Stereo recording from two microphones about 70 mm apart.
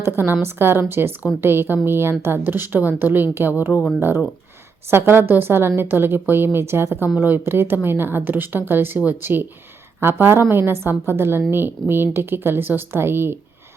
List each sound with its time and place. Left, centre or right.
0.0 s a woman's voice: right
4.9 s a woman's voice: right